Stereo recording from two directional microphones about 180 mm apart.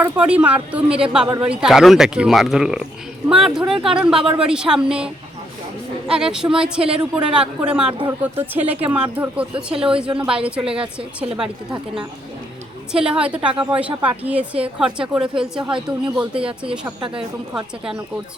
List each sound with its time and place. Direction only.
0.0 s a woman's voice: 5° right (ahead or behind)
6.1 s a woman's voice: 5° right (ahead or behind)
9.7 s a woman's voice: 30° right (ahead or behind)
10.2 s a woman's voice: 5° right (ahead or behind)
12.9 s a woman's voice: 5° right (ahead or behind)